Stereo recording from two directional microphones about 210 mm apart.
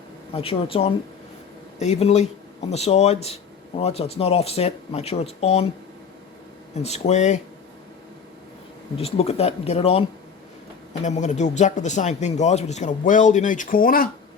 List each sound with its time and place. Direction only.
0.3 s speech: 25° left (ahead or behind)
6.7 s speech: 30° left (ahead or behind)
9.0 s speech: 30° left (ahead or behind)
11.0 s speech: 35° left (ahead or behind)